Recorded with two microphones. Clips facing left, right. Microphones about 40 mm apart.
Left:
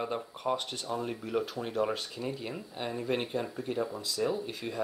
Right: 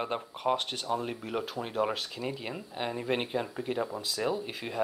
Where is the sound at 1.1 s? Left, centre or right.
Centre.